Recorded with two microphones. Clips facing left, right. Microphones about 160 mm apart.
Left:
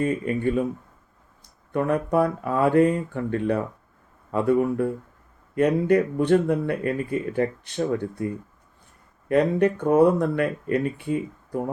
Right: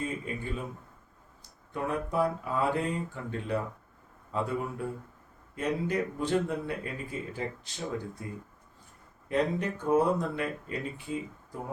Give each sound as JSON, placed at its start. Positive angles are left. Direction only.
{"t": 0.0, "sound": "speech", "side_deg": 60}
{"t": 1.7, "sound": "speech", "side_deg": 65}
{"t": 9.3, "sound": "speech", "side_deg": 65}